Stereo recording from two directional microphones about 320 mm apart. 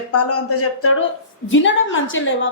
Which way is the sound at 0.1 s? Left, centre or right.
Left.